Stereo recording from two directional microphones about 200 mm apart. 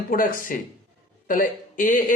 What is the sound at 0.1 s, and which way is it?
Speech, 45° left (ahead or behind).